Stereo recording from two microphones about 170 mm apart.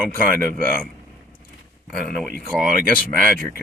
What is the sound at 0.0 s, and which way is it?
Speech, 10° left (ahead or behind).